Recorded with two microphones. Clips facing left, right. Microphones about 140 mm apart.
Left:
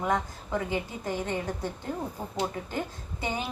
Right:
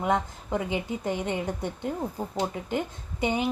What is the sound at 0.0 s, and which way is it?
A woman's voice, 20° right (ahead or behind).